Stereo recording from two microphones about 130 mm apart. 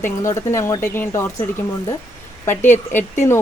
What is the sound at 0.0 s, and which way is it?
A woman's voice, 20° left (ahead or behind).